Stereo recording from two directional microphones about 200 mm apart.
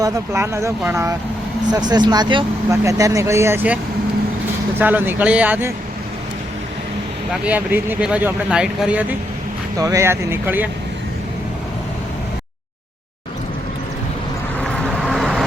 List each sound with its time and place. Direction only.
0.0 s speech: 15° right (ahead or behind)
4.8 s speech: 10° right (ahead or behind)
7.4 s speech: 10° right (ahead or behind)
14.6 s vehicle: 5° left (ahead or behind)